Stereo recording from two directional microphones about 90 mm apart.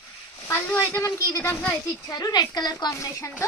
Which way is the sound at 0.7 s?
35° left (ahead or behind).